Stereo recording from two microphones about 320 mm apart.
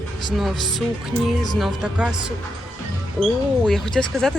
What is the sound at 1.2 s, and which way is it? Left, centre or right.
Speech, centre.